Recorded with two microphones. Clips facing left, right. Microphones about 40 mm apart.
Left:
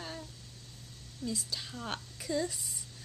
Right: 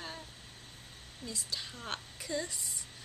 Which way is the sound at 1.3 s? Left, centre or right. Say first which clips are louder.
Left 1 dB; centre.